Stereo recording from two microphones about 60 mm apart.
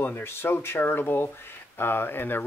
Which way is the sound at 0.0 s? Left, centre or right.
Left.